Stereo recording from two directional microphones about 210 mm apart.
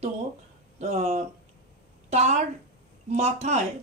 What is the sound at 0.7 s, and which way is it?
A woman's voice, 30° right (ahead or behind).